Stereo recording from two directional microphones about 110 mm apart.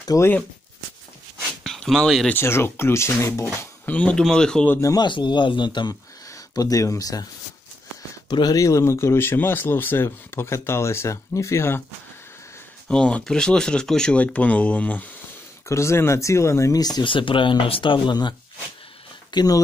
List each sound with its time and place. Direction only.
0.0 s speech: 30° left (ahead or behind)
1.6 s a sound: 5° left (ahead or behind)
2.2 s speech: 20° left (ahead or behind)
3.5 s speech: 15° left (ahead or behind)
4.6 s speech: 30° left (ahead or behind)
5.0 s speech: 45° left (ahead or behind)
6.2 s speech: 30° left (ahead or behind)
8.3 s speech: 40° left (ahead or behind)
12.8 s speech: 10° left (ahead or behind)
15.7 s speech: 25° left (ahead or behind); by 18.3 s 45° left (ahead or behind)
19.3 s speech: 35° left (ahead or behind)